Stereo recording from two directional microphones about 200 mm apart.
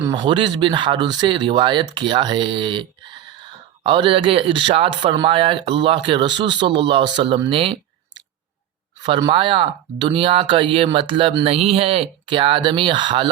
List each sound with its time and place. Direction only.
0.0 s speech: 20° right (ahead or behind)